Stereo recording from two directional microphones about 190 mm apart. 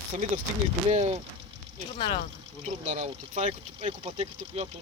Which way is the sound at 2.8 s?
40° right (ahead or behind).